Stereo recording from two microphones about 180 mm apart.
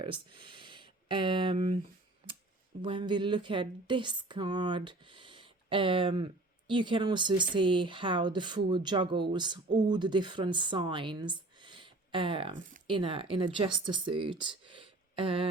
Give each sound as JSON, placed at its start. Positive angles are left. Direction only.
{"t": 0.0, "sound": "speech", "side_deg": -25}
{"t": 2.8, "sound": "speech", "side_deg": -25}